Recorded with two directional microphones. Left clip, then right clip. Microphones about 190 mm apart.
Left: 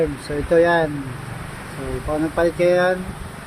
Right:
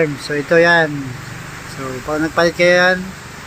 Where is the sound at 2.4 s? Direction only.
5° right (ahead or behind).